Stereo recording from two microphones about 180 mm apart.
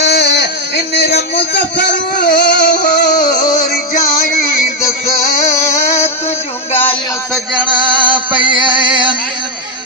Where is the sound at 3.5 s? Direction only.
50° left (ahead or behind).